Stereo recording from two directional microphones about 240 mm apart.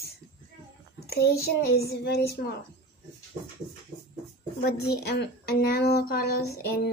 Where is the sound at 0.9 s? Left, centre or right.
Left.